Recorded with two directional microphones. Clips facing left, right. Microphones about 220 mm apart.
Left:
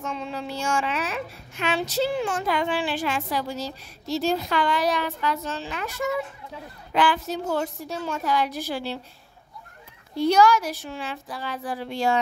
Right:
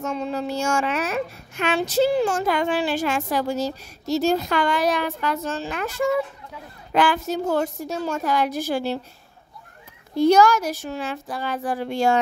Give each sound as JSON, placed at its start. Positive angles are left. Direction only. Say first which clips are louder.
{"t": 0.0, "sound": "speech", "louder": "right 5 dB", "side_deg": -45}
{"t": 10.1, "sound": "speech", "louder": "right 3 dB", "side_deg": -45}